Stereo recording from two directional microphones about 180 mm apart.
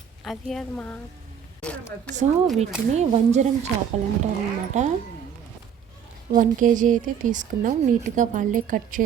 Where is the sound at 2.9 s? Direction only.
40° right (ahead or behind).